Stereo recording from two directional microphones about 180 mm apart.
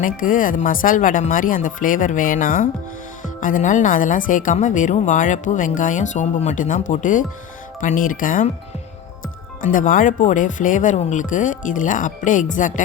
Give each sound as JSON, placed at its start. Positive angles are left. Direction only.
{"t": 0.0, "sound": "a woman's voice", "side_deg": 50}
{"t": 9.6, "sound": "a woman's voice", "side_deg": 45}